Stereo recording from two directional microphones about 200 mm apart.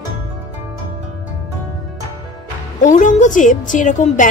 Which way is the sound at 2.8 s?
40° left (ahead or behind).